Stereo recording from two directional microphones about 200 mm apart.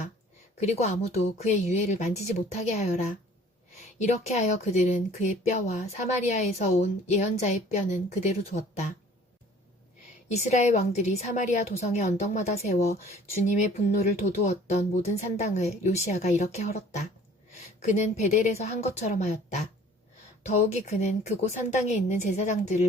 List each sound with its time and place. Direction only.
0.6 s a woman's voice: 35° left (ahead or behind)
10.3 s a woman's voice: 35° left (ahead or behind)